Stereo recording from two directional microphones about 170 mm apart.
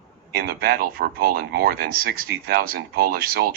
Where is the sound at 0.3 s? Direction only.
65° right (ahead or behind).